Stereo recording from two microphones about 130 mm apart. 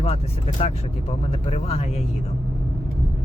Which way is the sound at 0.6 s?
50° left (ahead or behind).